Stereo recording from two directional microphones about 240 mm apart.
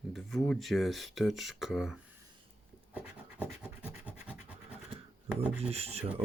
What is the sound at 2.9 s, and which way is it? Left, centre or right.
Scratch, centre.